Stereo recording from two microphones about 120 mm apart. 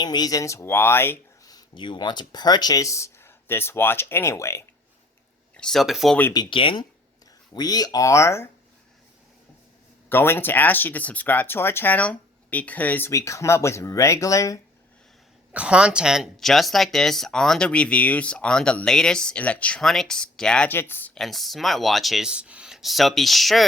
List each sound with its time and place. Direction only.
0.0 s speech: 35° left (ahead or behind); by 1.2 s 20° left (ahead or behind)
1.5 s speech: 40° left (ahead or behind)
5.5 s speech: 5° left (ahead or behind)
6.5 s speech: 45° left (ahead or behind)
7.5 s speech: 35° left (ahead or behind)
10.1 s speech: 20° left (ahead or behind)
13.1 s speech: 25° left (ahead or behind)
15.5 s speech: 10° right (ahead or behind); by 21.1 s 15° left (ahead or behind)
21.2 s speech: centre (ahead or behind)